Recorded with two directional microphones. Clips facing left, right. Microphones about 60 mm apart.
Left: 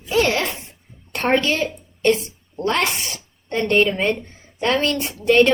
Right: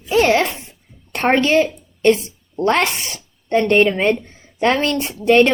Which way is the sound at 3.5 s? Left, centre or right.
Right.